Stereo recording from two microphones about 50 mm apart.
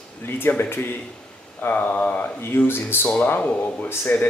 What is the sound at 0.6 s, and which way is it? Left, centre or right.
Speech, left.